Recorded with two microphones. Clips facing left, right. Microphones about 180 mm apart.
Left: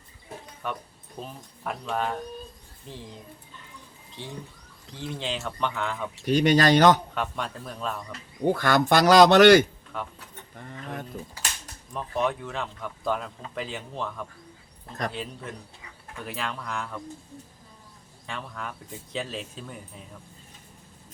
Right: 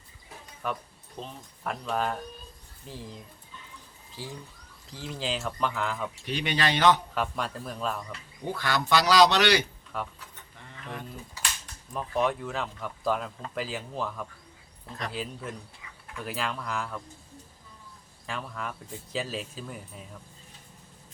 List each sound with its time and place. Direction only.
0.6 s speech: 5° left (ahead or behind)
4.2 s speech: 5° right (ahead or behind)
6.2 s speech: 40° left (ahead or behind)
7.1 s speech: centre (ahead or behind)
8.4 s speech: 50° left (ahead or behind)
9.9 s speech: centre (ahead or behind)
10.5 s a sound: 50° left (ahead or behind)
11.9 s speech: centre (ahead or behind)
18.3 s speech: centre (ahead or behind)